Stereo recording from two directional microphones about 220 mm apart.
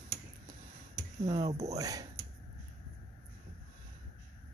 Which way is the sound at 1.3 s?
30° right (ahead or behind).